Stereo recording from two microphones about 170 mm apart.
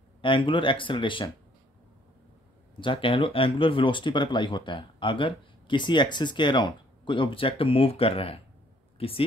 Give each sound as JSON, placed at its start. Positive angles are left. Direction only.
{"t": 0.2, "sound": "speech", "side_deg": 30}
{"t": 2.8, "sound": "speech", "side_deg": 30}